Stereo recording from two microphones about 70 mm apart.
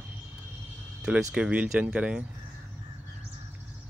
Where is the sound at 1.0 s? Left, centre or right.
Centre.